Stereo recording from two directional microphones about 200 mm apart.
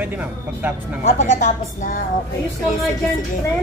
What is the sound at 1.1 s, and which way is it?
Speech, 35° left (ahead or behind).